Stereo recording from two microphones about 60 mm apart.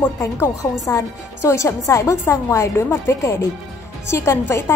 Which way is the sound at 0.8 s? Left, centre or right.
Left.